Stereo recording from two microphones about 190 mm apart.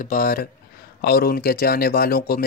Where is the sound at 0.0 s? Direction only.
45° left (ahead or behind).